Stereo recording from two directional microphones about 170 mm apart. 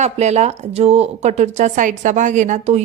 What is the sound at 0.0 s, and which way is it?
Speech, 40° right (ahead or behind).